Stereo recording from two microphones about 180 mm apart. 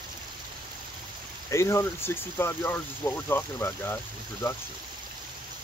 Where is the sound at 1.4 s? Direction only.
15° left (ahead or behind).